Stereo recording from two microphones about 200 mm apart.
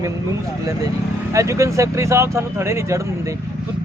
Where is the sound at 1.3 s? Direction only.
15° right (ahead or behind).